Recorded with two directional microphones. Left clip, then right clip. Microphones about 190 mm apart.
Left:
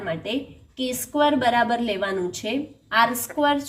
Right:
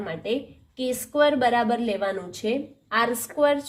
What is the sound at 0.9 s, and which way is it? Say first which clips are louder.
A woman's voice: even; 55° right (ahead or behind).